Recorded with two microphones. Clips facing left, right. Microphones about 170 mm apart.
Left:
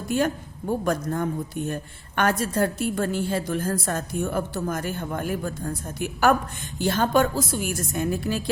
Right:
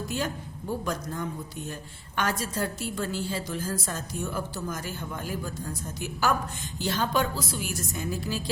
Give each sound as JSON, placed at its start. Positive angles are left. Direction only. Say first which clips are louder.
{"t": 0.1, "sound": "a woman's voice", "louder": "left 11 dB", "side_deg": 55}